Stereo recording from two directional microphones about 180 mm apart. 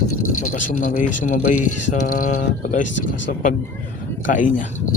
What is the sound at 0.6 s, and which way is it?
Speech, 50° left (ahead or behind).